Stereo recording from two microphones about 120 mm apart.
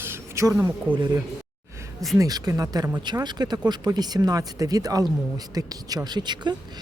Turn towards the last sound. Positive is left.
turn(degrees=-35)  # may be behind; listen again after turning